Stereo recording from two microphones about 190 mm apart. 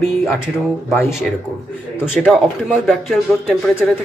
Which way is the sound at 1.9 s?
Centre (ahead or behind).